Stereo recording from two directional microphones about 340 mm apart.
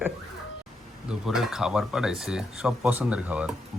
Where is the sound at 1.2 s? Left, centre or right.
Centre.